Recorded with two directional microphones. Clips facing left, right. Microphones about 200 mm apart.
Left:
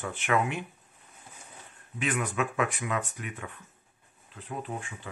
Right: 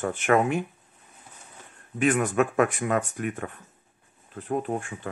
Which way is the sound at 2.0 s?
50° right (ahead or behind).